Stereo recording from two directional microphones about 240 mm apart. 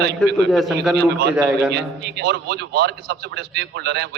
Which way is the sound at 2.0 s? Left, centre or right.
Right.